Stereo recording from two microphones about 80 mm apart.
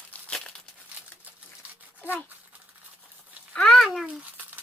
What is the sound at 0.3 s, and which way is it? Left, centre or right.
Crumpling, centre.